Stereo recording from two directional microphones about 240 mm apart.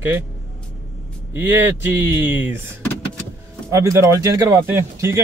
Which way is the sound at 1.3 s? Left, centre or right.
Centre.